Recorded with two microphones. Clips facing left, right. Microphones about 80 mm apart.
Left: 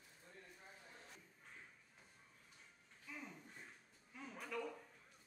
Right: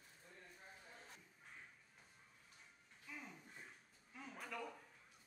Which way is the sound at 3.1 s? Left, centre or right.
Centre.